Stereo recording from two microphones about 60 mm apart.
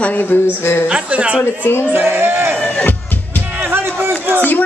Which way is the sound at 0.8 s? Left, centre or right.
Right.